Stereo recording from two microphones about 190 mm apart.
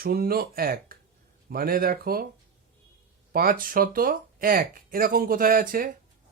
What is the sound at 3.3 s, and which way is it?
Speech, 50° right (ahead or behind).